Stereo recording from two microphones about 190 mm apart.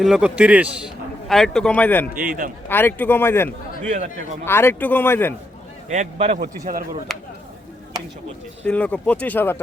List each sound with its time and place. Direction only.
0.0 s a man's voice: 5° right (ahead or behind)
2.2 s speech: 45° right (ahead or behind)
2.6 s speech: 10° left (ahead or behind)
5.9 s speech: 35° right (ahead or behind)
6.3 s speech: 50° right (ahead or behind)
7.1 s speech: centre (ahead or behind)
8.6 s speech: 10° left (ahead or behind)